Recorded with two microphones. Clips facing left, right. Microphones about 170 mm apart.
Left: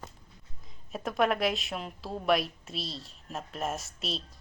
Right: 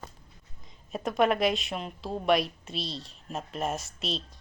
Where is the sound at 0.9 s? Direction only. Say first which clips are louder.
Right 2 dB; centre (ahead or behind).